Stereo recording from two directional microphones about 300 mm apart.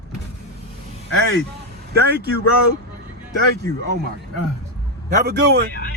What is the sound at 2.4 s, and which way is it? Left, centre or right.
Speech, left.